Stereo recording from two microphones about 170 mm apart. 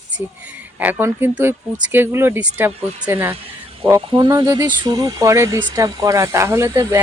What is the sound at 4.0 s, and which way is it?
Speech, 25° right (ahead or behind).